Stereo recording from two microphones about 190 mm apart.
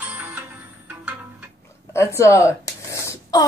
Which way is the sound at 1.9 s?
15° left (ahead or behind).